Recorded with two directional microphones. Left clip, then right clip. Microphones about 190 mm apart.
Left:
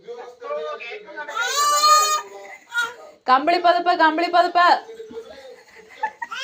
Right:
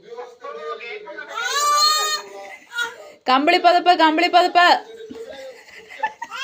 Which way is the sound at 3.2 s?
40° right (ahead or behind).